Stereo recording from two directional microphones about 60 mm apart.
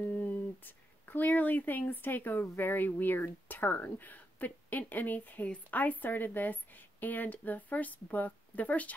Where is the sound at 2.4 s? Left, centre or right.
Left.